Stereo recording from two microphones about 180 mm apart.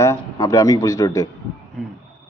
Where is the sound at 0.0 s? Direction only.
15° left (ahead or behind).